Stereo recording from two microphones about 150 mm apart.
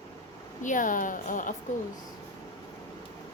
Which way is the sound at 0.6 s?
60° left (ahead or behind).